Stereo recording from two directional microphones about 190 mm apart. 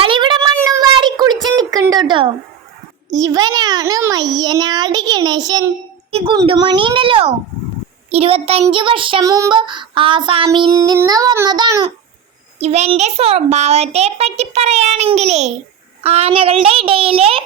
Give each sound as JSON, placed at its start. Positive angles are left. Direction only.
{"t": 0.0, "sound": "a sound", "side_deg": -25}
{"t": 3.1, "sound": "child singing", "side_deg": -20}
{"t": 6.1, "sound": "a woman's voice", "side_deg": -30}
{"t": 6.3, "sound": "child singing", "side_deg": -25}
{"t": 8.1, "sound": "a child's voice", "side_deg": -30}
{"t": 8.6, "sound": "child singing", "side_deg": -25}
{"t": 12.5, "sound": "a child's voice", "side_deg": -35}
{"t": 16.0, "sound": "child singing", "side_deg": -30}